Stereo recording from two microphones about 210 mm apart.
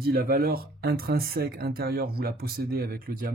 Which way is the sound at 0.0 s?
45° right (ahead or behind).